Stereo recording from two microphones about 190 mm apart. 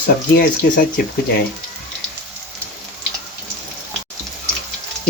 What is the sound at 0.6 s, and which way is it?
Speech, 60° left (ahead or behind).